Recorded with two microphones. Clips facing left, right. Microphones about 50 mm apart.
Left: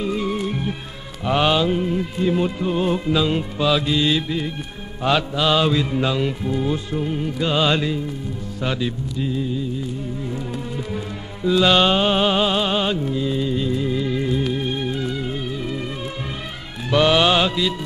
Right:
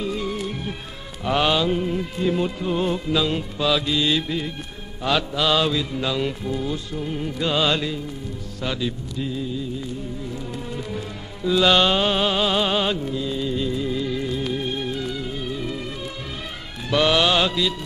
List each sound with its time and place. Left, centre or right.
0.0 s music: centre
6.1 s music: centre
6.7 s music: left
7.1 s music: centre
8.5 s music: centre
10.5 s music: centre
12.5 s music: centre
16.9 s music: centre